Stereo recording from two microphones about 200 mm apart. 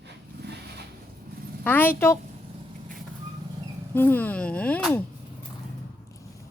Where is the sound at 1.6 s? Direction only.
10° left (ahead or behind).